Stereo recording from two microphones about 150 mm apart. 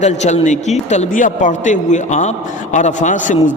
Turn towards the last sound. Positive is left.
turn(degrees=55)  # may be behind; listen again after turning